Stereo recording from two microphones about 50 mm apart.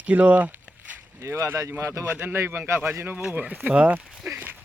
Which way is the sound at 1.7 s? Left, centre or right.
Right.